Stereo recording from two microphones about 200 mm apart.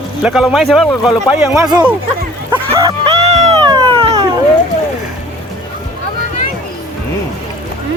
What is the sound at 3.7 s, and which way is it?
Cat, 25° right (ahead or behind).